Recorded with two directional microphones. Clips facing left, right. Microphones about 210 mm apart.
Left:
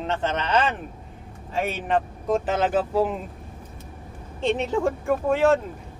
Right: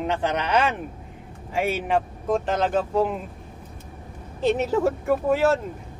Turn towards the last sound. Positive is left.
turn(degrees=-5)  # may be behind; listen again after turning